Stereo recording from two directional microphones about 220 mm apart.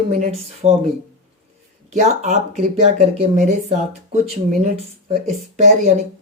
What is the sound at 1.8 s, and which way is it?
Speech, 30° right (ahead or behind).